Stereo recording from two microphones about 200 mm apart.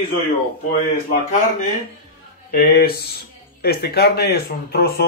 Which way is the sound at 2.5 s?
50° left (ahead or behind).